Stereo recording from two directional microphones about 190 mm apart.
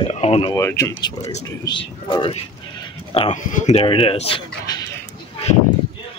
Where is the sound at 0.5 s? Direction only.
15° left (ahead or behind).